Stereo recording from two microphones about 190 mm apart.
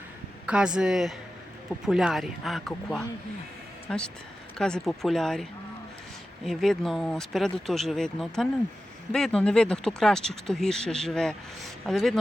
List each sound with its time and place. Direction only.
0.4 s speech: 5° right (ahead or behind)